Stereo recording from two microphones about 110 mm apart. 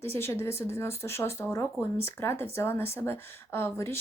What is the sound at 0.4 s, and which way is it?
Speech, 25° left (ahead or behind).